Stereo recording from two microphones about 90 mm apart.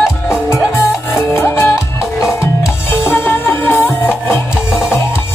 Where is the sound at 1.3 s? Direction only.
30° left (ahead or behind).